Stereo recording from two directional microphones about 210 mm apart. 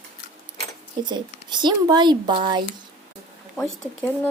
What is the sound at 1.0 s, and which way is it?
Speech, 20° right (ahead or behind).